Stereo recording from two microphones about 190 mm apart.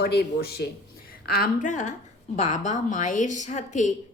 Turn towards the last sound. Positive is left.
turn(degrees=40)  # may be behind; listen again after turning